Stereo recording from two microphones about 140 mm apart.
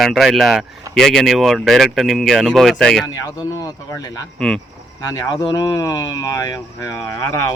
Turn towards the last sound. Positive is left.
turn(degrees=20)  # may be behind; listen again after turning